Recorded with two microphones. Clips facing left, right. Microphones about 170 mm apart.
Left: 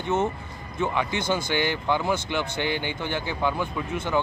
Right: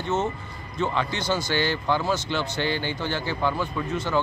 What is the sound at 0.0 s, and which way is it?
Speech, 10° left (ahead or behind).